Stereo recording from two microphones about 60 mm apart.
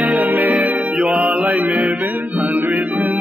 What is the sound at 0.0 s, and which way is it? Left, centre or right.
Music, right.